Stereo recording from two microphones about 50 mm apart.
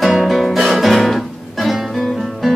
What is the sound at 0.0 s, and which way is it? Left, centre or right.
Music, centre.